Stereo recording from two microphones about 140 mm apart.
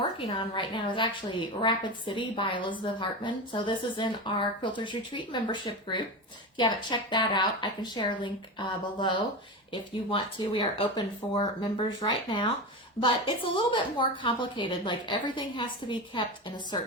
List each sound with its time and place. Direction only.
0.3 s a woman's voice: 35° left (ahead or behind)